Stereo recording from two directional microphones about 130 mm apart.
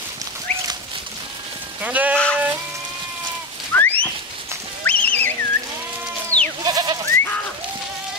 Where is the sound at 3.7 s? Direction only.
15° left (ahead or behind).